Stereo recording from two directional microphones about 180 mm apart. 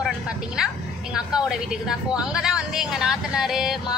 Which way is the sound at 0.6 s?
5° right (ahead or behind).